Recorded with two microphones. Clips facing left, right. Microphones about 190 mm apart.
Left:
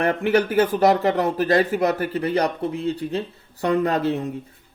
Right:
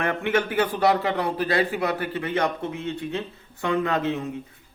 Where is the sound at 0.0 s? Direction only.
35° left (ahead or behind).